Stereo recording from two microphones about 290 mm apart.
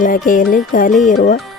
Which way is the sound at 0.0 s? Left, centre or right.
Left.